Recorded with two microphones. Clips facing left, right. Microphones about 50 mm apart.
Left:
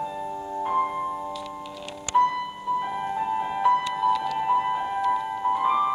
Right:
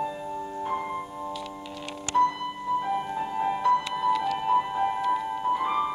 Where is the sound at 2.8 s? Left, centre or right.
Centre.